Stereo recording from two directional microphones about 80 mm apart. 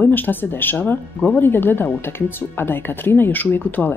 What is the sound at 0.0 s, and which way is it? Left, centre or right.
Speech, left.